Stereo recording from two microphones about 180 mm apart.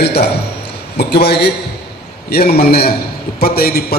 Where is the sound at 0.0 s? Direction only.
65° left (ahead or behind).